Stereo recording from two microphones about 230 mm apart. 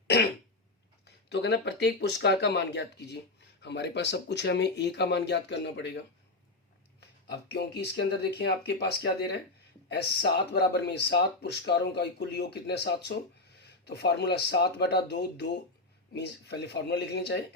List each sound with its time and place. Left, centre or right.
1.0 s speech: left
7.0 s speech: left